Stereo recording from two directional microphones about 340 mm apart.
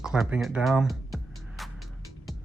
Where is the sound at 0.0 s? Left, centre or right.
Centre.